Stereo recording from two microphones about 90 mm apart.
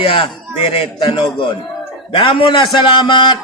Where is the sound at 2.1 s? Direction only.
65° left (ahead or behind).